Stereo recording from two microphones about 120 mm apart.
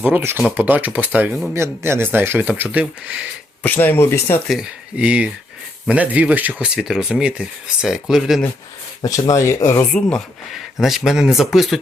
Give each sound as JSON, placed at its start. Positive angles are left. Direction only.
{"t": 0.0, "sound": "speech", "side_deg": -20}
{"t": 3.6, "sound": "speech", "side_deg": 15}
{"t": 4.4, "sound": "speech", "side_deg": -5}
{"t": 9.0, "sound": "speech", "side_deg": 30}
{"t": 9.9, "sound": "speech", "side_deg": 10}
{"t": 10.5, "sound": "speech", "side_deg": 0}